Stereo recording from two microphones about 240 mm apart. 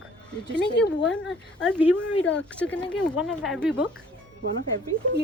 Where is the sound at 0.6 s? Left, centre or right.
Left.